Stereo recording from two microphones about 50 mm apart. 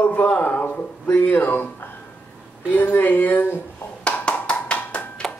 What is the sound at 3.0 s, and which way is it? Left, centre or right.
Speech, left.